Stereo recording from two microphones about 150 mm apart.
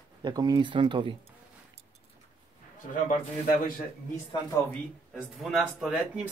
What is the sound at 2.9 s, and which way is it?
Speech, 65° left (ahead or behind).